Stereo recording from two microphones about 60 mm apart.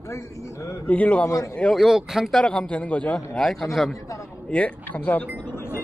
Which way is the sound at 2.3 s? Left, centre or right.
Centre.